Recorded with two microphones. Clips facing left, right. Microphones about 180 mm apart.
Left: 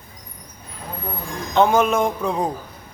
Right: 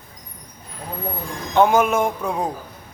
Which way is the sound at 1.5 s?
10° right (ahead or behind).